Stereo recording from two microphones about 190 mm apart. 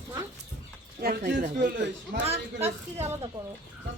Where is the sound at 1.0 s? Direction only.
60° right (ahead or behind).